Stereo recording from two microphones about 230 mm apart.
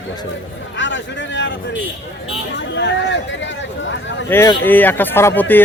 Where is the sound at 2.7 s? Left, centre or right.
Left.